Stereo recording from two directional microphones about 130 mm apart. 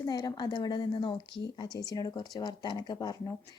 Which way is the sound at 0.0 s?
30° left (ahead or behind).